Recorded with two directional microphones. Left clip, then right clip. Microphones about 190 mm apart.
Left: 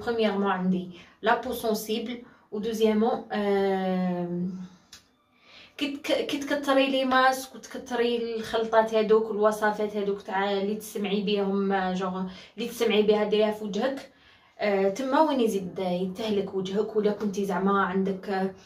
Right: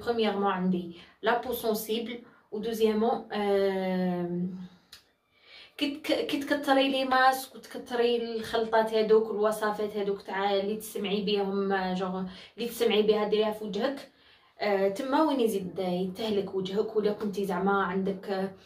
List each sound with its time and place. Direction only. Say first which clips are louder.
0.0 s a woman's voice: left 1 dB; centre (ahead or behind)
5.8 s a woman's voice: left 2 dB; centre (ahead or behind)